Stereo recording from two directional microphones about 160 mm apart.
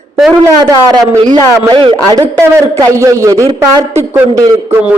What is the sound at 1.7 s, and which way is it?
Speech, 30° right (ahead or behind).